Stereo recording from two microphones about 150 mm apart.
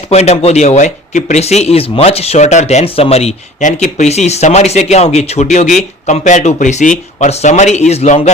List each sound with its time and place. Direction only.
0.1 s speech: 45° left (ahead or behind)